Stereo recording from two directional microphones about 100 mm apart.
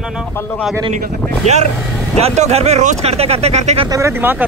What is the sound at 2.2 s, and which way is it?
Speech, 90° right.